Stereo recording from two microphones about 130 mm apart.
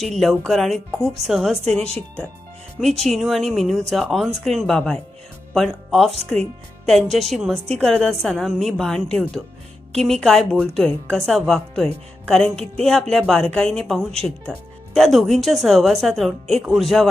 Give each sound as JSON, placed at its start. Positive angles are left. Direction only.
{"t": 0.0, "sound": "speech", "side_deg": 0}
{"t": 3.0, "sound": "speech", "side_deg": 0}
{"t": 6.1, "sound": "speech", "side_deg": -55}
{"t": 6.8, "sound": "speech", "side_deg": 0}